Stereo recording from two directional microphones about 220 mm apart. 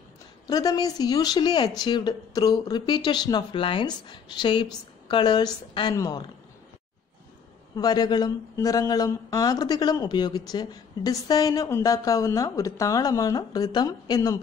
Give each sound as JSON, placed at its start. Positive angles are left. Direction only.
{"t": 0.5, "sound": "speech", "side_deg": 20}
{"t": 7.7, "sound": "speech", "side_deg": 20}